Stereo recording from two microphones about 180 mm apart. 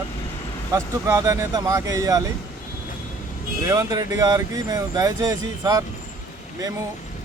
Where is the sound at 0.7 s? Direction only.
15° right (ahead or behind).